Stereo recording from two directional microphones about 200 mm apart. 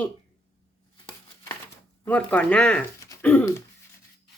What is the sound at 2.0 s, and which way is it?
Speech, 5° left (ahead or behind).